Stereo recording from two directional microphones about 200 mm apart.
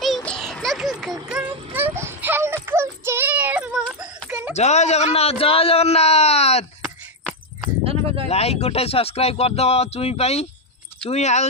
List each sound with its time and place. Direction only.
0.0 s children playing: centre (ahead or behind)
1.3 s a sound: 5° right (ahead or behind)
4.5 s a man's voice: 35° left (ahead or behind)
7.9 s speech: 30° right (ahead or behind)
8.3 s a man's voice: 30° left (ahead or behind)